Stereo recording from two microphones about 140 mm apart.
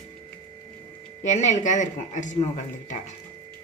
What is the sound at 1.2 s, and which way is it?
Speech, 55° left (ahead or behind).